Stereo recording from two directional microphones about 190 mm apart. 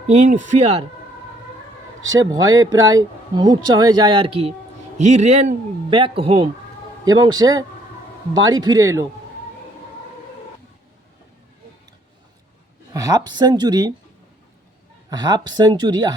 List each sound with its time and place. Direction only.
0.1 s a man's voice: 40° right (ahead or behind)
2.1 s a man's voice: 20° right (ahead or behind)
12.9 s speech: 20° right (ahead or behind)
15.1 s speech: 20° right (ahead or behind)